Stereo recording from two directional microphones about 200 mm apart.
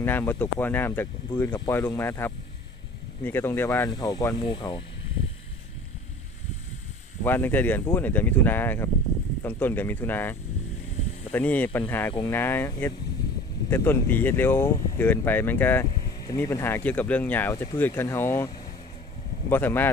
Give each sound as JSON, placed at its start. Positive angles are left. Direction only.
{"t": 0.0, "sound": "speech", "side_deg": 10}
{"t": 7.2, "sound": "speech", "side_deg": 10}
{"t": 11.3, "sound": "speech", "side_deg": 10}
{"t": 19.5, "sound": "speech", "side_deg": 10}